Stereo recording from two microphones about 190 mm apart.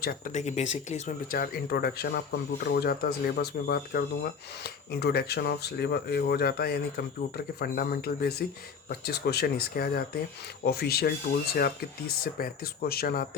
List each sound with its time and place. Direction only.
0.0 s speech: 45° left (ahead or behind)
12.2 s speech: 50° left (ahead or behind)